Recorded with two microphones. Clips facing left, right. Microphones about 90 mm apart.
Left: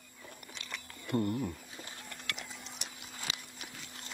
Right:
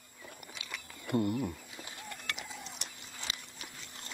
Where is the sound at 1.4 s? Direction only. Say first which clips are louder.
Right 1 dB; 5° right (ahead or behind).